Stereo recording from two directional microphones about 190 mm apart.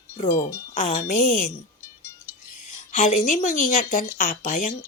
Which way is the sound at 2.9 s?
40° left (ahead or behind).